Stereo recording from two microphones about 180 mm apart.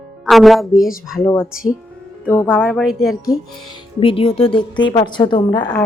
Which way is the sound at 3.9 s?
30° left (ahead or behind).